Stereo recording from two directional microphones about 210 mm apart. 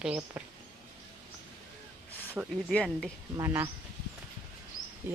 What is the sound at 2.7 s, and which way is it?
Speech, 5° left (ahead or behind).